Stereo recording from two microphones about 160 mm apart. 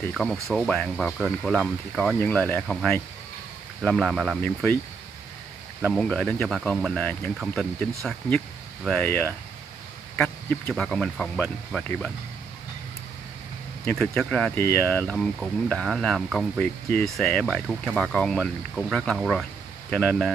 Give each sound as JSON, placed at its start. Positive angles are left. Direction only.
{"t": 0.1, "sound": "speech", "side_deg": 0}
{"t": 5.9, "sound": "speech", "side_deg": 5}
{"t": 10.1, "sound": "a sound", "side_deg": 10}
{"t": 10.7, "sound": "speech", "side_deg": 5}
{"t": 13.8, "sound": "speech", "side_deg": 5}